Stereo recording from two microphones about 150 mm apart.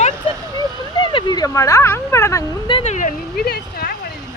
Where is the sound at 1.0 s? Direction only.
30° left (ahead or behind).